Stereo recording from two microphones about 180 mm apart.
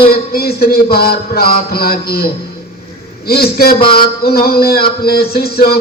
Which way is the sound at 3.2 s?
60° left (ahead or behind).